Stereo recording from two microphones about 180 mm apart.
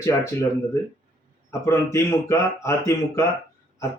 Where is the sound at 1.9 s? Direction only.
15° left (ahead or behind).